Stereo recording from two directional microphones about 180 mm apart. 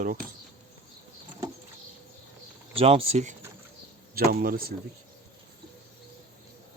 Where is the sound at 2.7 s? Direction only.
30° right (ahead or behind).